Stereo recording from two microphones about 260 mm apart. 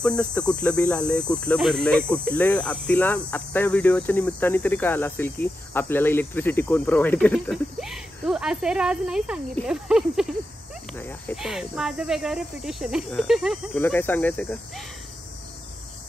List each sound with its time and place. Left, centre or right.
0.0 s speech: centre